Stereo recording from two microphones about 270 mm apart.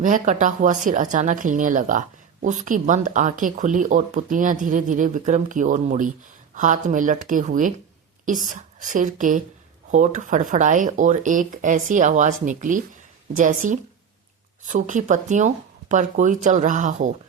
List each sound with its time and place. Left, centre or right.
0.0 s speech: right